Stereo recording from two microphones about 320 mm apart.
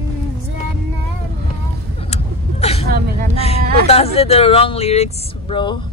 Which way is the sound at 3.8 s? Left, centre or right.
Centre.